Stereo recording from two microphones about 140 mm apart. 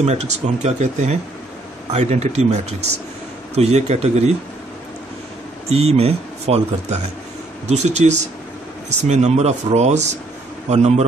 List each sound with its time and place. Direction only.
0.0 s speech: 50° right (ahead or behind)
5.7 s speech: 50° right (ahead or behind)